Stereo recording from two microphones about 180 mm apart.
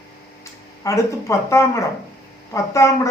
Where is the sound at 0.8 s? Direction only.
15° left (ahead or behind).